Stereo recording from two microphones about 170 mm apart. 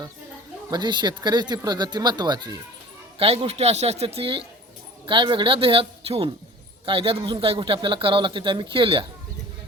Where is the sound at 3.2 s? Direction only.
35° right (ahead or behind).